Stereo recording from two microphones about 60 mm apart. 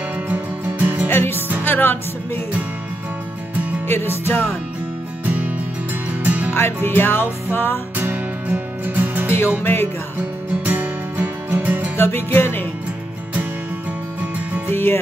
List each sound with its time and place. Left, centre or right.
0.3 s music: right
1.0 s music: left
3.8 s music: left
5.2 s music: right
6.5 s music: left
8.0 s music: right
9.6 s music: left
10.6 s music: right
12.0 s music: left
14.7 s music: left